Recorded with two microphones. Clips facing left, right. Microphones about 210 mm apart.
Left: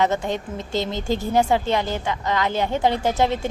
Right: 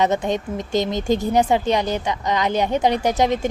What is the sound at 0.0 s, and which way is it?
A woman's voice, 20° right (ahead or behind).